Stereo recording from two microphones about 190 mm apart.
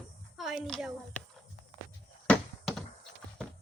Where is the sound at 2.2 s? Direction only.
5° left (ahead or behind).